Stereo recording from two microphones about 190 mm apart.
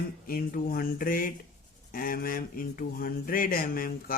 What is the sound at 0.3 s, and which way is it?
Speech, 50° left (ahead or behind).